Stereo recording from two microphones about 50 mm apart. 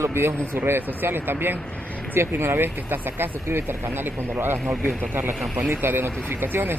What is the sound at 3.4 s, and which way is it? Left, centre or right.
Speech, right.